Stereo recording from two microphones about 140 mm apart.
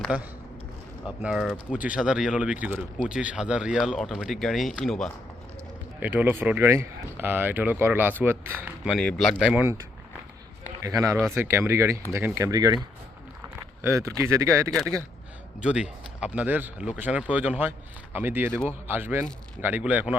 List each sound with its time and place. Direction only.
0.1 s speech: 10° right (ahead or behind); by 5.1 s 5° left (ahead or behind)
6.0 s speech: 15° right (ahead or behind)
9.0 s speech: 5° left (ahead or behind)
10.8 s speech: 20° right (ahead or behind)
13.8 s speech: 20° right (ahead or behind)
15.6 s speech: 5° right (ahead or behind)